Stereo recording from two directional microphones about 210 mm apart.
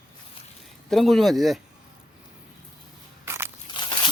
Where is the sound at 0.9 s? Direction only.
Centre (ahead or behind).